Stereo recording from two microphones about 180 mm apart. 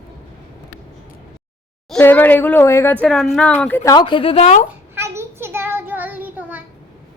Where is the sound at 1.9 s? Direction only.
10° left (ahead or behind).